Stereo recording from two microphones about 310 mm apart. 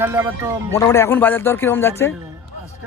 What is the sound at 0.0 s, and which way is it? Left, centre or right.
Speech, centre.